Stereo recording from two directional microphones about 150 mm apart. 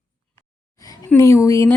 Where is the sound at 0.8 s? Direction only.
20° left (ahead or behind).